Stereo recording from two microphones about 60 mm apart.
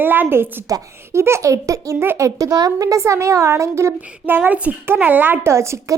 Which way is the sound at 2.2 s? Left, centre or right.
Right.